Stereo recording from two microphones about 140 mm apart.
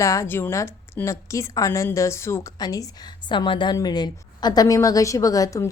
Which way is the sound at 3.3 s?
35° left (ahead or behind).